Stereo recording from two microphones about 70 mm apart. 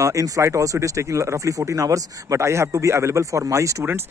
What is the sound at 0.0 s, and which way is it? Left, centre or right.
Speech, right.